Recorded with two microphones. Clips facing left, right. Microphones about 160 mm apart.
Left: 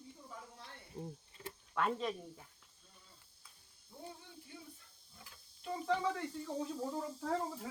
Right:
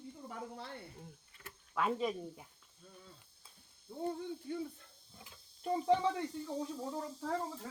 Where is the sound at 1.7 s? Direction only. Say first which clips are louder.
Right 2 dB; 5° right (ahead or behind).